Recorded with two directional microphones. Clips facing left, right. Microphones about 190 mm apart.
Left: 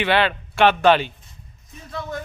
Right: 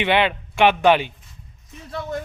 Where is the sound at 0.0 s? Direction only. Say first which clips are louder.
Even; 20° right (ahead or behind).